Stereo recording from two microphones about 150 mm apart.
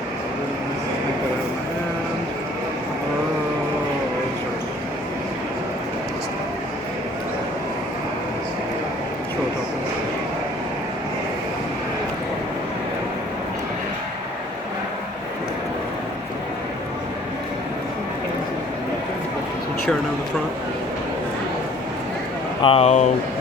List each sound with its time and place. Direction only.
22.6 s speech: 40° left (ahead or behind)